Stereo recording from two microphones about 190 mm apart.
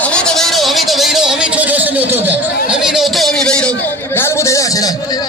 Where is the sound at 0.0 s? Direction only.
5° left (ahead or behind).